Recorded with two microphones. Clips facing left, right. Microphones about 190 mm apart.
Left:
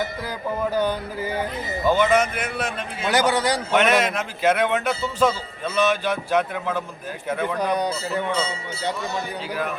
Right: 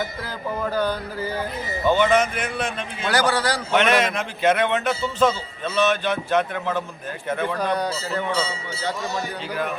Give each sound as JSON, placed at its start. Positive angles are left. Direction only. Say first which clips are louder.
{"t": 0.7, "sound": "speech", "louder": "left 1 dB", "side_deg": 20}
{"t": 1.9, "sound": "speech", "louder": "even", "side_deg": 10}
{"t": 3.1, "sound": "speech", "louder": "left 1 dB", "side_deg": 20}
{"t": 3.7, "sound": "speech", "louder": "right 1 dB", "side_deg": 5}